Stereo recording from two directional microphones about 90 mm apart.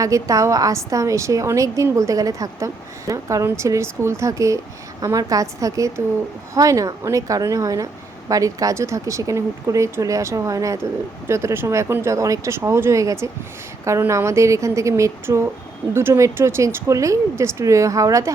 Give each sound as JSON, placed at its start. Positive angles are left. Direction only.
{"t": 0.0, "sound": "a woman's voice", "side_deg": -40}